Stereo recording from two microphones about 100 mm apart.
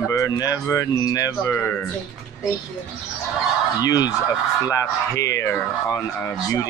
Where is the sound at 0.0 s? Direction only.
35° left (ahead or behind).